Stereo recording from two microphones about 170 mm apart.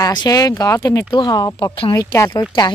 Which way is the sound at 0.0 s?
25° left (ahead or behind).